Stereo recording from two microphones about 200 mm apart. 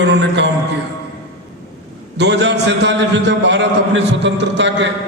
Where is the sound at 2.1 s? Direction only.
60° right (ahead or behind).